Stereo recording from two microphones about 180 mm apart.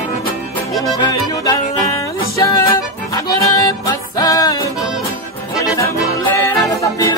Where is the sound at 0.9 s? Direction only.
20° left (ahead or behind).